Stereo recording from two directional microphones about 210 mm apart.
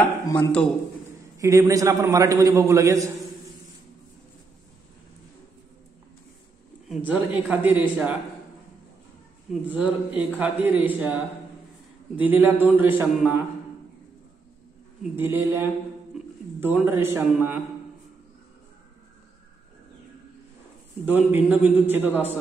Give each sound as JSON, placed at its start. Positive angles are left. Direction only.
{"t": 0.5, "sound": "a man's voice", "side_deg": 5}
{"t": 1.4, "sound": "a man's voice", "side_deg": -15}
{"t": 6.9, "sound": "a man's voice", "side_deg": -10}
{"t": 9.5, "sound": "a man's voice", "side_deg": -5}
{"t": 12.2, "sound": "a man's voice", "side_deg": -10}
{"t": 15.1, "sound": "a man's voice", "side_deg": -10}
{"t": 21.0, "sound": "a man's voice", "side_deg": -10}